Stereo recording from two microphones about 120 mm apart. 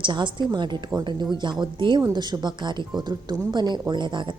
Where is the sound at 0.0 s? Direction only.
40° right (ahead or behind).